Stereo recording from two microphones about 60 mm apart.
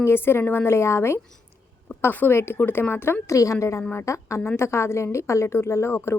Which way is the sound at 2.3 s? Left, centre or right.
Left.